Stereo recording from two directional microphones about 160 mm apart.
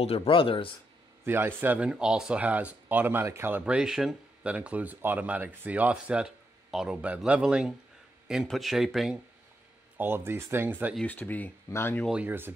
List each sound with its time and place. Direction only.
0.0 s speech: 40° left (ahead or behind)
1.2 s speech: 15° right (ahead or behind)
9.9 s speech: 15° right (ahead or behind)
11.0 s speech: 10° left (ahead or behind)
12.1 s speech: 10° right (ahead or behind)